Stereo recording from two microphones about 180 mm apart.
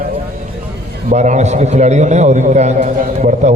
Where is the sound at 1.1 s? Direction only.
40° right (ahead or behind).